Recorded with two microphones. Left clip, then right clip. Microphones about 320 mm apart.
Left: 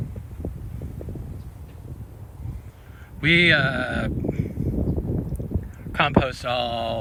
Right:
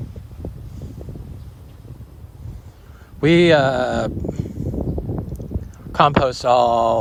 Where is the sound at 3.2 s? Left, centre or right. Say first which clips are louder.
Right 4 dB; centre.